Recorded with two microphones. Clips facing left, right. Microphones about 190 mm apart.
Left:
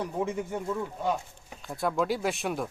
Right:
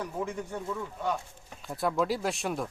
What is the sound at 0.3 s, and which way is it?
Speech, 20° left (ahead or behind).